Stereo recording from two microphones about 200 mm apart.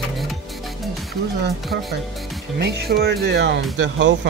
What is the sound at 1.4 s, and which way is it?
Speech, 55° right (ahead or behind).